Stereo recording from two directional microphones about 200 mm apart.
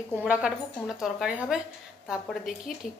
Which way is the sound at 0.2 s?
5° right (ahead or behind).